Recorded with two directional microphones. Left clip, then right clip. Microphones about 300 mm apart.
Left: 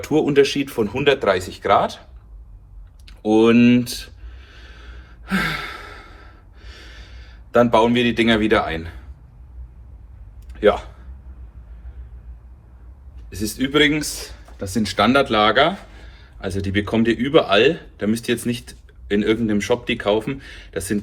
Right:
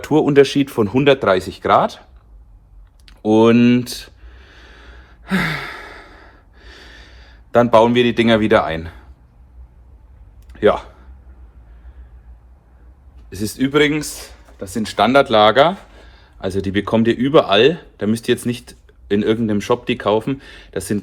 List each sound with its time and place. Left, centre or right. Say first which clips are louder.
0.0 s speech: right 3 dB; right
3.1 s a sound: right 2 dB; right
10.5 s a man's voice: right 2 dB; right
13.3 s speech: right 2 dB; centre